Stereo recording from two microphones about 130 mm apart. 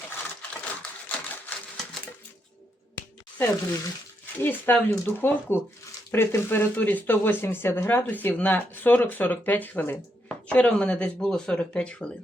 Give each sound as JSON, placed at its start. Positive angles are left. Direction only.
{"t": 0.7, "sound": "typewriter", "side_deg": 15}
{"t": 3.3, "sound": "speech", "side_deg": 15}